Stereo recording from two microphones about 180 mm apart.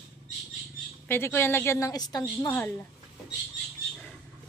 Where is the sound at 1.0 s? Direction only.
10° left (ahead or behind).